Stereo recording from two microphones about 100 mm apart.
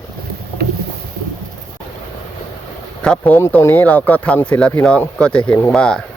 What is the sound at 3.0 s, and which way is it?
Speech, 10° left (ahead or behind).